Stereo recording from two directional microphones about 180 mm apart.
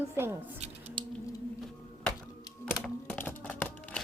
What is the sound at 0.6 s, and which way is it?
Squish, 35° right (ahead or behind).